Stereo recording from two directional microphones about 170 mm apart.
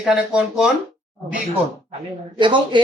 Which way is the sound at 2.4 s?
30° right (ahead or behind).